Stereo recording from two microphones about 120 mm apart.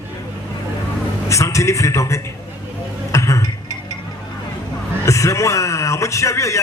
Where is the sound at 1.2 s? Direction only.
25° left (ahead or behind).